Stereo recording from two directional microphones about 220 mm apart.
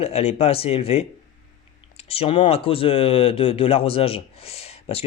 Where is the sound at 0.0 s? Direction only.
25° left (ahead or behind).